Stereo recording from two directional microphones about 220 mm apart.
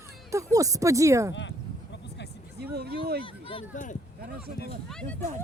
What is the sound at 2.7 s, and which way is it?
Speech, 45° right (ahead or behind).